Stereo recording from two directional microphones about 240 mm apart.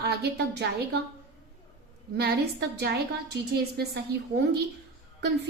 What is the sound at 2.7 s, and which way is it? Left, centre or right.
A woman's voice, right.